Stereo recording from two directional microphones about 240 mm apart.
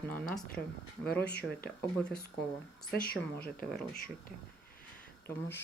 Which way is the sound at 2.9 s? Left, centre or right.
Left.